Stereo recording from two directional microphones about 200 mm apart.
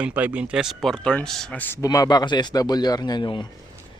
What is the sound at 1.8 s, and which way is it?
Speech, 20° left (ahead or behind).